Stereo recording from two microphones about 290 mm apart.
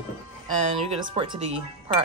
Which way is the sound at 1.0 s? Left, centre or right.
Centre.